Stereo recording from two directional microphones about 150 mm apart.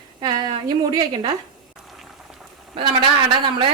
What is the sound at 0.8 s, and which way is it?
Speech, 25° right (ahead or behind).